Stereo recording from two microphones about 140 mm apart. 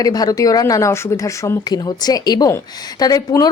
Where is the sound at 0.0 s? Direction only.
25° left (ahead or behind).